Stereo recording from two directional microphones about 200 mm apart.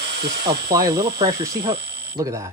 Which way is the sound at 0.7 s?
15° right (ahead or behind).